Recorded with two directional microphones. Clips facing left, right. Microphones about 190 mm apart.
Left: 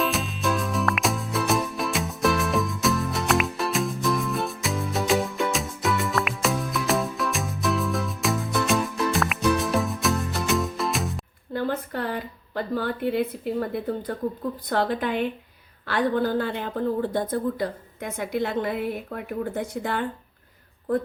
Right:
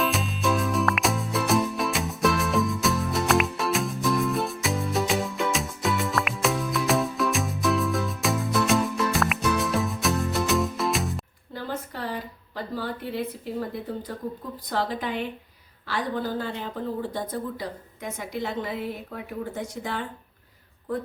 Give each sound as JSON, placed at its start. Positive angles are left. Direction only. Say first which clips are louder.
{"t": 0.0, "sound": "music", "louder": "even", "side_deg": 0}
{"t": 11.5, "sound": "a sound", "louder": "left 6 dB", "side_deg": 60}
{"t": 14.1, "sound": "speech", "louder": "left 5 dB", "side_deg": 60}